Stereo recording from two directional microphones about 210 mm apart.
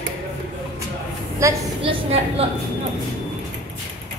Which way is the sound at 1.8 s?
30° right (ahead or behind).